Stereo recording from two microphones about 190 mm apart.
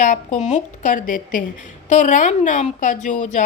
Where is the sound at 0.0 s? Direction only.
40° left (ahead or behind).